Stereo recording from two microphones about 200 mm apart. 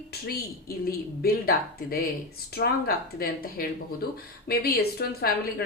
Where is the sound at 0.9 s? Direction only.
50° left (ahead or behind).